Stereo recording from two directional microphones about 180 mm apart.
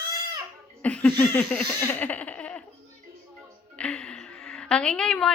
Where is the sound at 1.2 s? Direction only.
10° left (ahead or behind).